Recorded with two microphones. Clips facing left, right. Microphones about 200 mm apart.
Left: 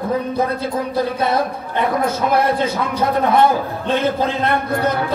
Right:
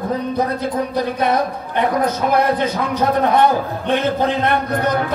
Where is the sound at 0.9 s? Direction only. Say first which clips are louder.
Left 1 dB; 15° right (ahead or behind).